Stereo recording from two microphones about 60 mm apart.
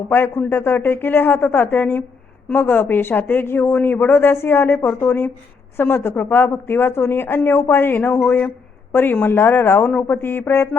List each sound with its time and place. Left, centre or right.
0.3 s speech: left
5.0 s speech: left